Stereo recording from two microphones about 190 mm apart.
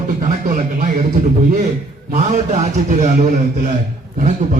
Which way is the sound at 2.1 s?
40° right (ahead or behind).